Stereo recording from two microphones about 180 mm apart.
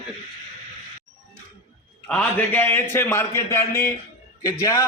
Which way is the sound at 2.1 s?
10° left (ahead or behind).